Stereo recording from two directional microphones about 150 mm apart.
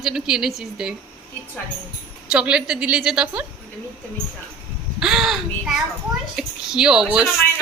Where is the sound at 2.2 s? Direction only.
5° right (ahead or behind).